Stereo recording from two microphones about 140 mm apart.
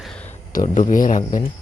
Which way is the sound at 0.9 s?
70° left (ahead or behind).